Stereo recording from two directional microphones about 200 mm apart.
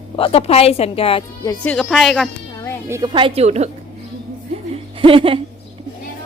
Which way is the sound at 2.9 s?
20° right (ahead or behind).